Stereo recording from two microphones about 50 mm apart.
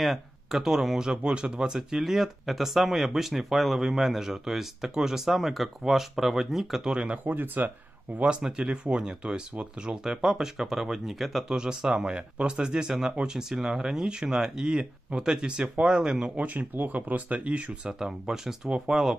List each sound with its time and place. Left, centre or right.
0.0 s speech: centre
7.0 s speech: right
7.3 s speech: right
8.2 s speech: centre
11.4 s speech: centre
16.3 s speech: right
17.9 s speech: centre